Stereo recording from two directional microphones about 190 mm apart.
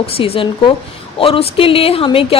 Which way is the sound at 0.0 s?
30° left (ahead or behind).